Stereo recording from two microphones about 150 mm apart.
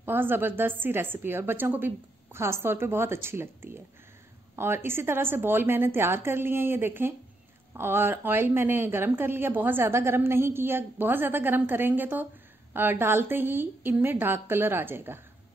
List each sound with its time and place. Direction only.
0.0 s a woman's voice: 15° right (ahead or behind)